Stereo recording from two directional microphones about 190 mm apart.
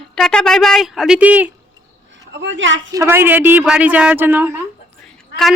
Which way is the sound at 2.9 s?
15° right (ahead or behind).